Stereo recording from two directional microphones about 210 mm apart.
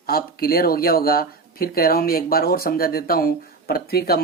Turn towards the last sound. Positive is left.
turn(degrees=45)  # may be behind; listen again after turning